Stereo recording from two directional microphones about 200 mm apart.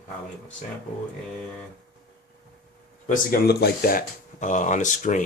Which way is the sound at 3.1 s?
50° left (ahead or behind).